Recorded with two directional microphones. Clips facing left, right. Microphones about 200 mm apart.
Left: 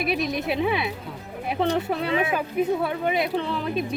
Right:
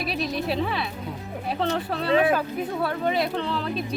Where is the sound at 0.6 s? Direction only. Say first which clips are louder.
Left 3 dB; 15° left (ahead or behind).